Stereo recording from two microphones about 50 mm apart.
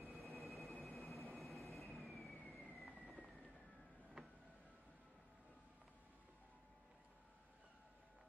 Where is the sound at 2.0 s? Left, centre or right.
Centre.